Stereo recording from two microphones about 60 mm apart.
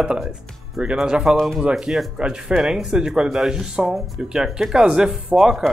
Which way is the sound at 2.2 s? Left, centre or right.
Centre.